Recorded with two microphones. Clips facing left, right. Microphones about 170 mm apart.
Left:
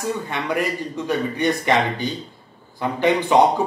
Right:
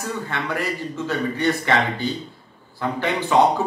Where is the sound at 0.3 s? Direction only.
15° left (ahead or behind).